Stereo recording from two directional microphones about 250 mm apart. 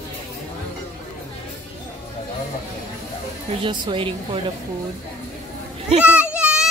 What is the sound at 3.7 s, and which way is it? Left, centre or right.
Speech, centre.